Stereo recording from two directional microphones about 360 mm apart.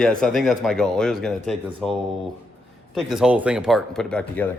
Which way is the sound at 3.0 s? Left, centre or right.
Centre.